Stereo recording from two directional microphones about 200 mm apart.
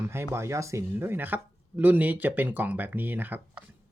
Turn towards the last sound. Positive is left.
turn(degrees=-10)  # may be behind; listen again after turning